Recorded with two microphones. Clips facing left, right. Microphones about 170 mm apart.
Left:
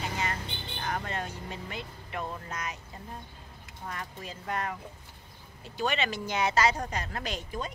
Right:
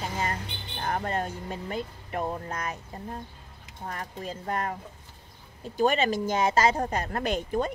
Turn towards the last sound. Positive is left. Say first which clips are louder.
# right 8 dB
turn(degrees=-55)  # may be behind; listen again after turning